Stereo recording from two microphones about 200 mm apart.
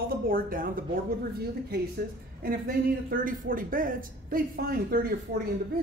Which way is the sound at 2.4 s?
45° right (ahead or behind).